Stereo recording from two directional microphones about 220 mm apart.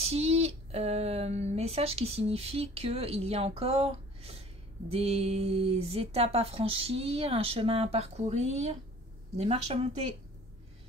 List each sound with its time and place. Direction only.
0.0 s speech: 30° right (ahead or behind)